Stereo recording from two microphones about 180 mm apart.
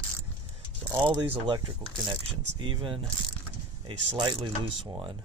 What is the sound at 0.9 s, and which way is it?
Speech, 10° right (ahead or behind).